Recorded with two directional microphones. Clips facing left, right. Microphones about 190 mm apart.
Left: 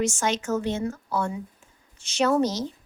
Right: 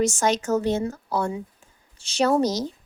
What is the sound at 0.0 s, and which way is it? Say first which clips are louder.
A woman's voice: right 4 dB; 40° right (ahead or behind).